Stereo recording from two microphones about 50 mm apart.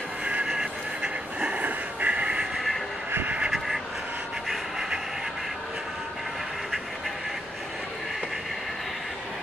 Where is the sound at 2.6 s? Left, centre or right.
Centre.